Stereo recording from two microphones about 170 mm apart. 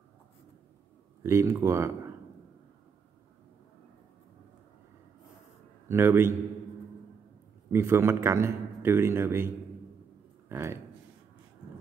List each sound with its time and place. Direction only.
1.2 s a man's voice: 15° right (ahead or behind)
5.9 s a man's voice: 15° right (ahead or behind)
7.7 s a man's voice: 15° right (ahead or behind)
10.5 s speech: 15° right (ahead or behind)